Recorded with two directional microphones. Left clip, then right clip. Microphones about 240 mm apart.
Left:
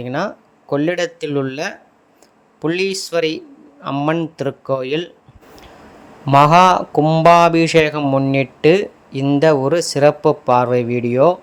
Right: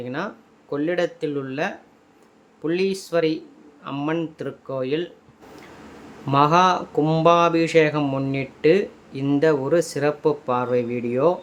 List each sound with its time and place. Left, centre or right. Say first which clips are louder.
0.0 s speech: left 7 dB; left
6.2 s speech: left 7 dB; left